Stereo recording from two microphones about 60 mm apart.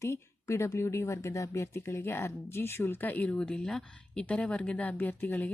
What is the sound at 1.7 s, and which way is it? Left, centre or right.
Speech, left.